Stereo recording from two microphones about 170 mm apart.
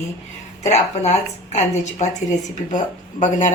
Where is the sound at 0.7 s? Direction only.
40° left (ahead or behind).